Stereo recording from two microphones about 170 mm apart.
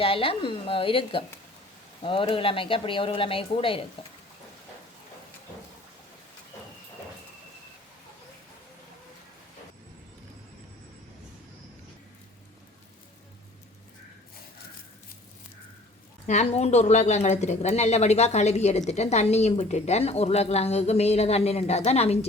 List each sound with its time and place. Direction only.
0.0 s speech: 30° left (ahead or behind)
16.2 s speech: 45° left (ahead or behind)